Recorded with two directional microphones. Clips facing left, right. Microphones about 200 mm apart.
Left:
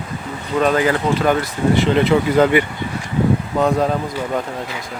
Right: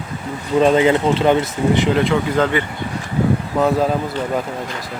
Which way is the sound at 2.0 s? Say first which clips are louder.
Left 3 dB; 10° left (ahead or behind).